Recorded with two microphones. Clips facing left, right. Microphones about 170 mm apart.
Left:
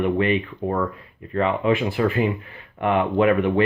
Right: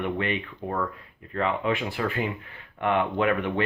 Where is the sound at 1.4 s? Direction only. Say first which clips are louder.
Left 6 dB; 20° left (ahead or behind).